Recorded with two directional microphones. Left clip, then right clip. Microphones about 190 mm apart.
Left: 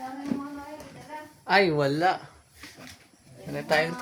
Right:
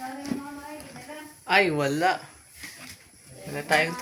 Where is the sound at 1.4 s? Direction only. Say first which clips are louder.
Even; 20° left (ahead or behind).